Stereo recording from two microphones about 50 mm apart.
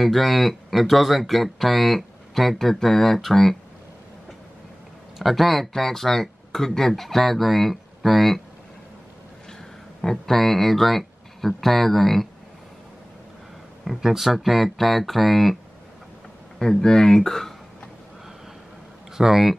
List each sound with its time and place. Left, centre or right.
0.0 s speech: centre
5.2 s speech: centre
10.0 s speech: centre
13.8 s speech: centre
16.5 s speech: centre
19.1 s speech: centre